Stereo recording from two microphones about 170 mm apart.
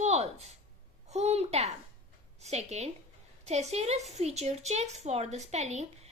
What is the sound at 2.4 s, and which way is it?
A woman's voice, 40° right (ahead or behind).